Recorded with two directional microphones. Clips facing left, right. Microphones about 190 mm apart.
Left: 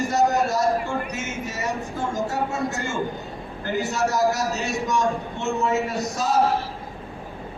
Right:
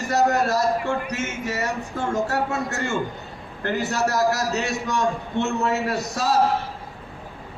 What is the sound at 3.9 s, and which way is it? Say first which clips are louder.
A man's voice: even; 65° right (ahead or behind).